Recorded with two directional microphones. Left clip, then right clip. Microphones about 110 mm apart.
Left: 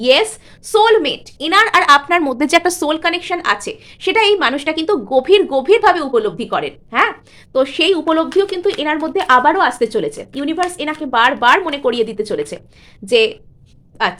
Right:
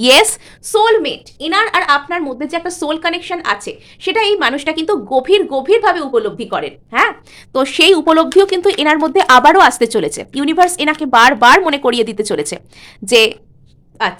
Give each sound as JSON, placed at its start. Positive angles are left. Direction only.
{"t": 0.0, "sound": "speech", "side_deg": -60}
{"t": 0.8, "sound": "a woman's voice", "side_deg": 10}
{"t": 2.0, "sound": "speech", "side_deg": 30}
{"t": 2.3, "sound": "a woman's voice", "side_deg": 45}
{"t": 2.8, "sound": "a woman's voice", "side_deg": 5}
{"t": 4.4, "sound": "a woman's voice", "side_deg": 0}
{"t": 7.5, "sound": "speech", "side_deg": -50}
{"t": 14.0, "sound": "a woman's voice", "side_deg": -5}